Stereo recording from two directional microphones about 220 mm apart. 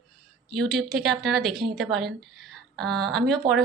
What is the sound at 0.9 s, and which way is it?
Speech, centre (ahead or behind).